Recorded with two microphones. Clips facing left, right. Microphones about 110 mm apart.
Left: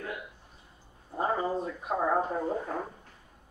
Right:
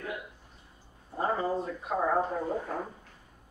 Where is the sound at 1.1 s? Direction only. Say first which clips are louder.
Even; 20° left (ahead or behind).